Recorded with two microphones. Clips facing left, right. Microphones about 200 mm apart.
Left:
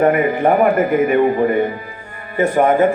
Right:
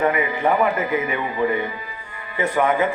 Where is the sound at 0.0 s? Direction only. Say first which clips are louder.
Left 6 dB; 50° left (ahead or behind).